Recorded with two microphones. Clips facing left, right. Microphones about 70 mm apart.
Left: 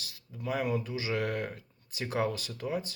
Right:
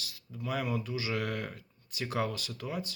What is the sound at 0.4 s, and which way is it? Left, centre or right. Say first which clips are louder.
Speech: left 2 dB; left.